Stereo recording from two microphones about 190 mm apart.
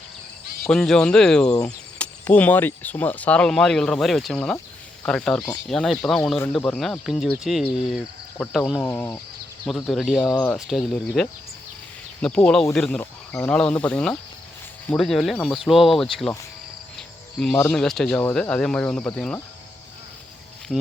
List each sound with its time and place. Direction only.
0.7 s speech: 5° left (ahead or behind)
8.8 s speech: 10° left (ahead or behind)
9.6 s speech: centre (ahead or behind)
10.2 s speech: 20° left (ahead or behind)
10.5 s speech: centre (ahead or behind)
17.4 s speech: 5° left (ahead or behind)